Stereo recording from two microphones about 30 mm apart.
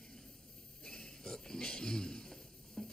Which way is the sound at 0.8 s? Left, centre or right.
Centre.